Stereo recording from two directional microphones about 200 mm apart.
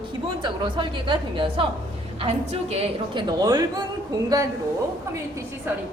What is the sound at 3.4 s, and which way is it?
Speech, 20° right (ahead or behind).